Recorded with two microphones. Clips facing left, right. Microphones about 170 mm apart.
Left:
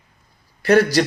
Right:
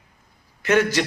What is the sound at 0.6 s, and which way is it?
Speech, 35° left (ahead or behind).